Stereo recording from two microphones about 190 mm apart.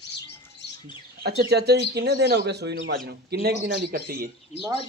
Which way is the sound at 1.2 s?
55° right (ahead or behind).